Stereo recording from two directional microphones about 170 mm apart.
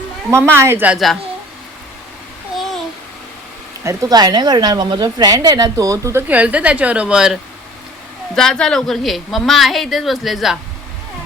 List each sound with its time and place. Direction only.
0.5 s a woman's voice: 15° right (ahead or behind)
3.8 s a woman's voice: 20° right (ahead or behind); by 7.3 s 5° right (ahead or behind)
8.4 s a woman's voice: 5° left (ahead or behind)